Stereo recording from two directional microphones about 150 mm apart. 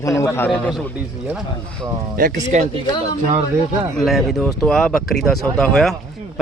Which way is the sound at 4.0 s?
Centre (ahead or behind).